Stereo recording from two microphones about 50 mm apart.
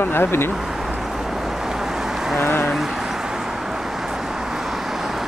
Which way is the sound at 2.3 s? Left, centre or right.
Left.